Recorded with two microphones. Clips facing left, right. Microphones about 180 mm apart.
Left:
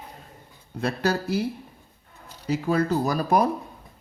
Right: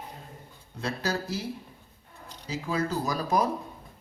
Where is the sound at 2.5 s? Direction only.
60° left (ahead or behind).